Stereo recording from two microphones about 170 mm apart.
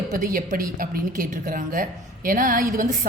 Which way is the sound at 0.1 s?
55° right (ahead or behind).